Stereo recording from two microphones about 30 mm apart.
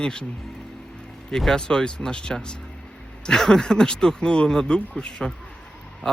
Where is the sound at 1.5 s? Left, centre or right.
Left.